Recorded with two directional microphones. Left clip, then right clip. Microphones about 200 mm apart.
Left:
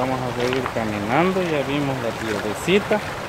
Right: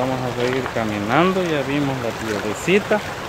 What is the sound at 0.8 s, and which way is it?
Speech, 20° right (ahead or behind).